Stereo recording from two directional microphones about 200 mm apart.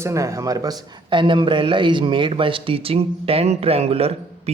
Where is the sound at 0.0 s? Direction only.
15° right (ahead or behind).